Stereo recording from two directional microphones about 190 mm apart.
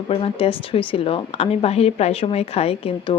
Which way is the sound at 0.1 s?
30° left (ahead or behind).